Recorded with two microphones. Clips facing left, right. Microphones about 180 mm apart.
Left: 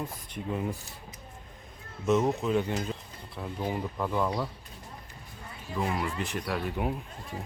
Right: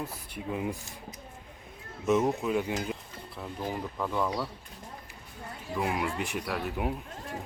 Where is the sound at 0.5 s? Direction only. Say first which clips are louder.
Even; 10° right (ahead or behind).